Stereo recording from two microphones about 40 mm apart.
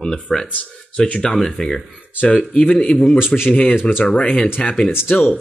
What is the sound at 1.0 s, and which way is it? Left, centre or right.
Speech, left.